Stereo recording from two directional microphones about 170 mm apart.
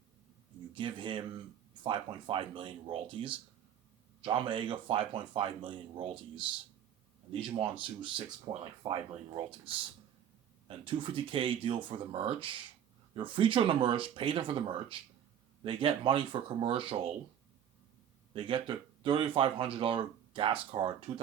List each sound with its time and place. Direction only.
0.7 s speech: 30° right (ahead or behind)
7.6 s speech: 30° right (ahead or behind)
18.3 s speech: 30° right (ahead or behind)